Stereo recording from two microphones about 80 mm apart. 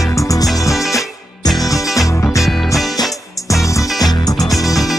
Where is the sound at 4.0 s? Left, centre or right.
Left.